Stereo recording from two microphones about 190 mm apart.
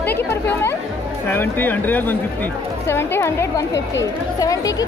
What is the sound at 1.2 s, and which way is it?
Speech, 10° left (ahead or behind).